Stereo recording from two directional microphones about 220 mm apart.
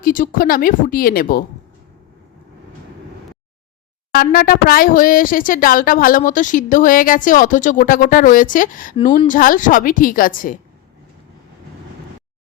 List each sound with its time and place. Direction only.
0.0 s speech: 40° left (ahead or behind)
4.1 s speech: 40° left (ahead or behind)